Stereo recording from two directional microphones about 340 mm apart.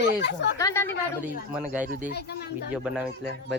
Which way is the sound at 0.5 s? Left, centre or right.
Centre.